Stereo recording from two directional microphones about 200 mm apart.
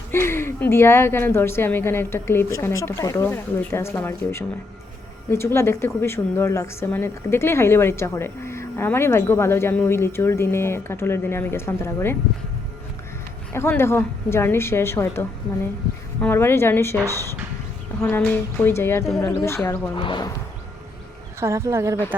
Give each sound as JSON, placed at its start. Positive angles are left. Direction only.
{"t": 0.1, "sound": "a woman's voice", "side_deg": 10}
{"t": 13.5, "sound": "a woman's voice", "side_deg": 10}
{"t": 18.0, "sound": "a woman's voice", "side_deg": 10}
{"t": 20.0, "sound": "speech", "side_deg": 25}
{"t": 21.4, "sound": "speech", "side_deg": -15}